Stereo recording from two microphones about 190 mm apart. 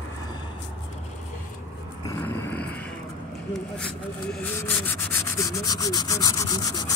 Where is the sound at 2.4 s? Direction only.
5° left (ahead or behind).